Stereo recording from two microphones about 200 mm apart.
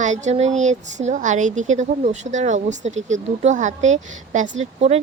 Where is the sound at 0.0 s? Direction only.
35° right (ahead or behind).